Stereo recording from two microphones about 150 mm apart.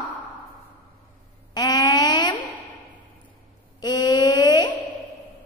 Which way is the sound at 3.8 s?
25° left (ahead or behind).